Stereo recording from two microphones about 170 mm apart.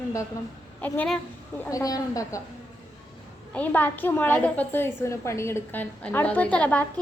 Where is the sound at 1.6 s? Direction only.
20° left (ahead or behind).